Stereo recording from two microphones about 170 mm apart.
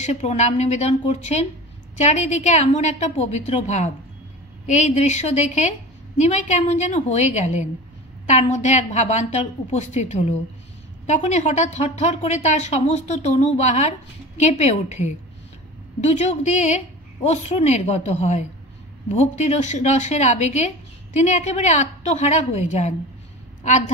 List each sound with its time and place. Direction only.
0.0 s a woman's voice: 40° left (ahead or behind)